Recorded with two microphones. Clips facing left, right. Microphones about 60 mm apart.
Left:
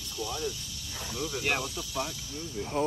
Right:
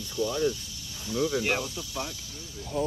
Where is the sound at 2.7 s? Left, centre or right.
Left.